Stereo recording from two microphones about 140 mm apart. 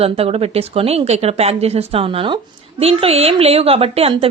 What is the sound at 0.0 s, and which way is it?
A woman's voice, 45° right (ahead or behind).